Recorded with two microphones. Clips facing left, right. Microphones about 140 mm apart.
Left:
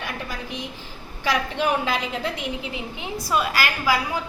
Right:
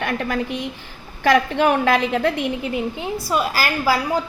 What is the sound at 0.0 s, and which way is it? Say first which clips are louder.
A woman's voice: right 9 dB; 60° right (ahead or behind).